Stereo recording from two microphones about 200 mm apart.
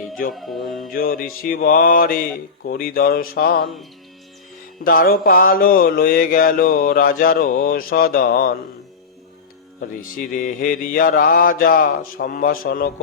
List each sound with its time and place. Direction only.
0.3 s music: centre (ahead or behind)
0.9 s mantra: 45° left (ahead or behind)
4.8 s mantra: 45° left (ahead or behind)
9.8 s mantra: 45° left (ahead or behind)